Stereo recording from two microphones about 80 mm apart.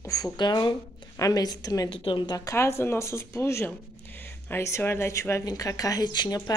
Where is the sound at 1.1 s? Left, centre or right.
Left.